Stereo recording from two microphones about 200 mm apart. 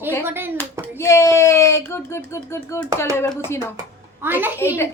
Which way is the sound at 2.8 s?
15° right (ahead or behind).